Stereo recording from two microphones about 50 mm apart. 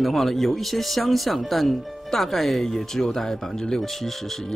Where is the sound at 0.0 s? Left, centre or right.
Centre.